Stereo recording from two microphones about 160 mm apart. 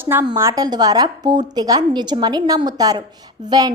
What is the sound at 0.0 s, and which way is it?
A woman's voice, 15° right (ahead or behind).